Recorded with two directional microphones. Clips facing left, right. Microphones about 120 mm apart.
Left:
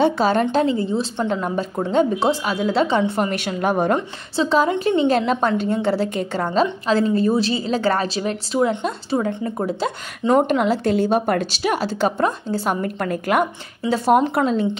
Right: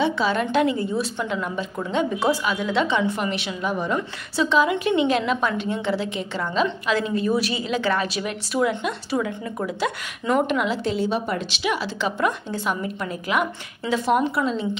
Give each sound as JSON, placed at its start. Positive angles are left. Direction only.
{"t": 0.0, "sound": "a woman's voice", "side_deg": 45}
{"t": 1.2, "sound": "a woman's voice", "side_deg": 40}
{"t": 4.4, "sound": "a woman's voice", "side_deg": 40}
{"t": 12.8, "sound": "a woman's voice", "side_deg": 55}
{"t": 13.4, "sound": "a woman's voice", "side_deg": 40}